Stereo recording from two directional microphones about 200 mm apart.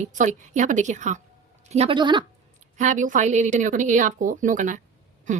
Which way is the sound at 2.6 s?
40° right (ahead or behind).